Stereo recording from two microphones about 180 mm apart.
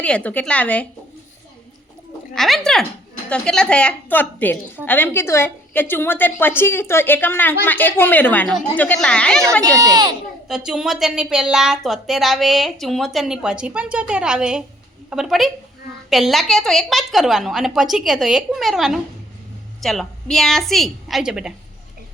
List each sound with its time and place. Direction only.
0.0 s a woman's voice: 10° left (ahead or behind)
2.3 s a woman's voice: centre (ahead or behind)
9.6 s speech: 20° right (ahead or behind)
10.5 s a woman's voice: 5° right (ahead or behind)